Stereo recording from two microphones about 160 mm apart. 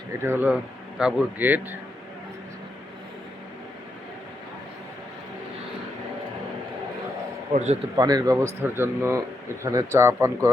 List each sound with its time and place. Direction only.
0.2 s speech: 10° right (ahead or behind)
7.5 s a man's voice: 45° right (ahead or behind)
7.9 s speech: 25° right (ahead or behind)